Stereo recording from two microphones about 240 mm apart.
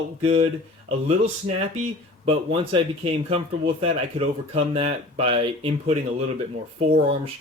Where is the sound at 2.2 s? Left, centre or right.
Right.